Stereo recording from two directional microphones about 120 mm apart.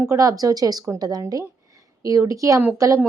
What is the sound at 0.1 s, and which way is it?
A woman's voice, 30° right (ahead or behind).